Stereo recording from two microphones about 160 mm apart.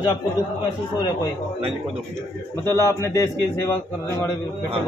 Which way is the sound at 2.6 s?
20° left (ahead or behind).